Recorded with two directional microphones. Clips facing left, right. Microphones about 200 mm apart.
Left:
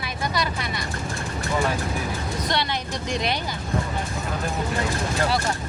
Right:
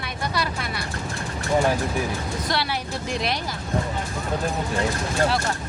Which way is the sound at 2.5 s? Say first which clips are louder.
Even; 5° right (ahead or behind).